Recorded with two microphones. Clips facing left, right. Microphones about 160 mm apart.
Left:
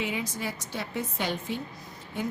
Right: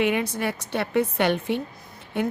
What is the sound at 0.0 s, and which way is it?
A woman's voice, 65° right (ahead or behind).